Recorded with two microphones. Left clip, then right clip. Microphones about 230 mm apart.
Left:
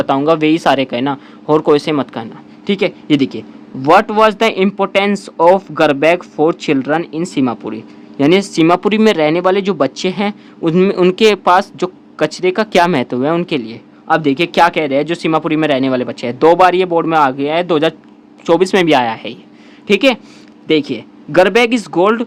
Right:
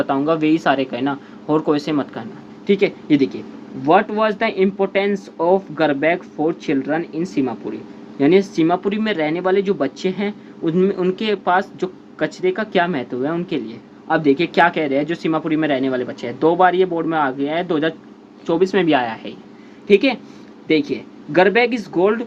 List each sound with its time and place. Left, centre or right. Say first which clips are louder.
0.0 s speech: left 6 dB; left
21.3 s speech: left 4 dB; left